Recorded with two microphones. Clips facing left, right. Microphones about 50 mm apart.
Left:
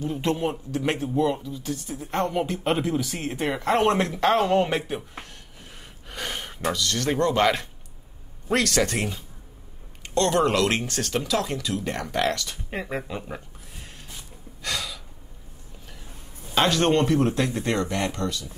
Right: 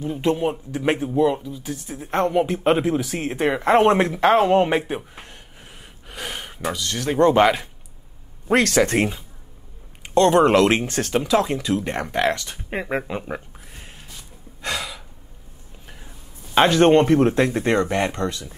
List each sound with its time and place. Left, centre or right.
0.2 s speech: centre
6.0 s gasp: centre
6.6 s speech: right
10.0 s speech: right
14.6 s gasp: right
16.5 s speech: right